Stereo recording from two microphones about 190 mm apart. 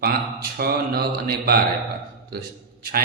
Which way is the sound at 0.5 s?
55° right (ahead or behind).